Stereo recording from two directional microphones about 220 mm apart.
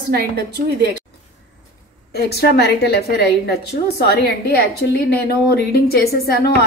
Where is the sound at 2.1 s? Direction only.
45° left (ahead or behind).